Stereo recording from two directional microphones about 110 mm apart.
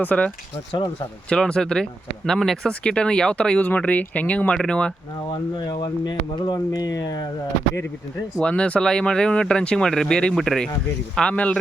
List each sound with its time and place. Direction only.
0.0 s speech: 15° left (ahead or behind)
1.3 s speech: 5° left (ahead or behind)
5.3 s speech: 40° left (ahead or behind)
8.4 s speech: 10° left (ahead or behind)